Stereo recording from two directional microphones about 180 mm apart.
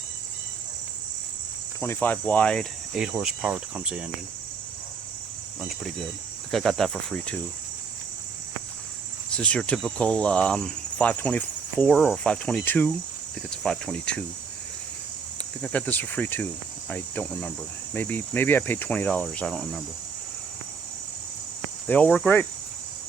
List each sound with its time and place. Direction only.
1.8 s cricket: 10° left (ahead or behind); by 4.1 s 5° right (ahead or behind)
5.5 s cricket: centre (ahead or behind)
9.3 s cricket: 5° left (ahead or behind)
15.6 s cricket: 10° left (ahead or behind)
21.8 s cricket: 10° left (ahead or behind)